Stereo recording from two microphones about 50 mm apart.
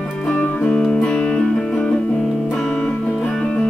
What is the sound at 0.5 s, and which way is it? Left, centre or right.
Music, centre.